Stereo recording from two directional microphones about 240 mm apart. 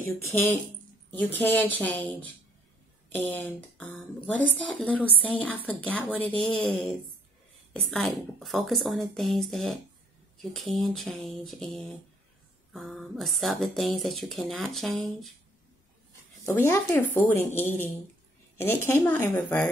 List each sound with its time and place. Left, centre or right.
0.0 s speech: centre
3.2 s speech: centre
16.4 s speech: centre